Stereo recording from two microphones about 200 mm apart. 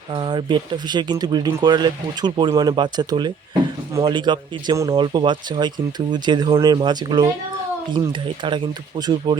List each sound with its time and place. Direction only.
0.1 s speech: 25° right (ahead or behind)